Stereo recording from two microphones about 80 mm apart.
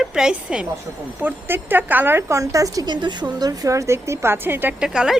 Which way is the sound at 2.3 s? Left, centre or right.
Right.